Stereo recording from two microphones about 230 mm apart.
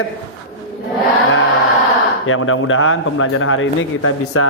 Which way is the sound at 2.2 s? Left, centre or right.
Left.